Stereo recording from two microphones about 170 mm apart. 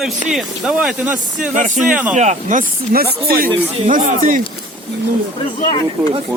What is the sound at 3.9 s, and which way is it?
Speech, 50° right (ahead or behind).